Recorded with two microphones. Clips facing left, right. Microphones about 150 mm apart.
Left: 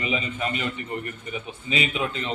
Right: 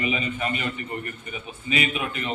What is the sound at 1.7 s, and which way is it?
Speech, 25° left (ahead or behind).